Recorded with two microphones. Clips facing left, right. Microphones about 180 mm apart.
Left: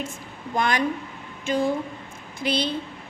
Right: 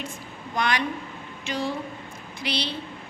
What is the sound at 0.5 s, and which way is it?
A woman's voice, 45° left (ahead or behind).